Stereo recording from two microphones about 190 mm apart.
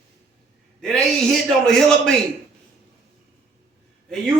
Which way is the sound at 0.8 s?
Centre (ahead or behind).